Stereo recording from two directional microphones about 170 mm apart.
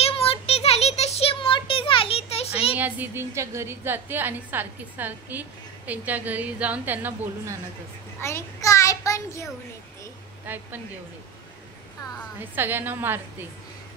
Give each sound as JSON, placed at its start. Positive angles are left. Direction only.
{"t": 0.0, "sound": "child singing", "side_deg": 35}
{"t": 2.7, "sound": "a woman's voice", "side_deg": -10}
{"t": 8.2, "sound": "a child's voice", "side_deg": 15}
{"t": 10.4, "sound": "a woman's voice", "side_deg": -10}
{"t": 12.4, "sound": "a woman's voice", "side_deg": -10}